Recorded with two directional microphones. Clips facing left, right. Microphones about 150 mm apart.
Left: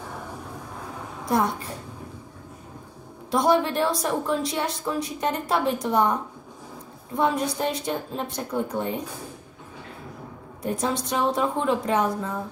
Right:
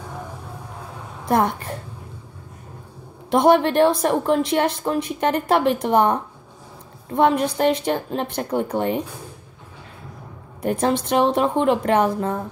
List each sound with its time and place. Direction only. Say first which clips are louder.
3.3 s speech: right 5 dB; 65° right (ahead or behind)
7.2 s a woman's voice: right 6 dB; 70° right (ahead or behind)
10.6 s a woman's voice: right 6 dB; 70° right (ahead or behind)